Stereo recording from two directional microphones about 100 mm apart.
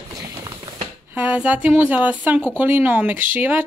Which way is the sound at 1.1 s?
15° right (ahead or behind).